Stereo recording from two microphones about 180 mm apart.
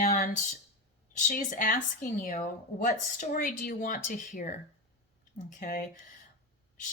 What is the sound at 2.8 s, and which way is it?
Speech, 45° left (ahead or behind).